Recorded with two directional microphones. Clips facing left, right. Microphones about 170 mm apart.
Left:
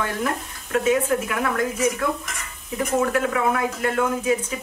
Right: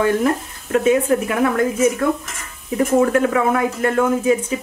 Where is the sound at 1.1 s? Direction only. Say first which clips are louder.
Right 6 dB; 25° right (ahead or behind).